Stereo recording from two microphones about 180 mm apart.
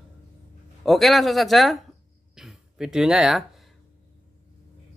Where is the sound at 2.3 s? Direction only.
Centre (ahead or behind).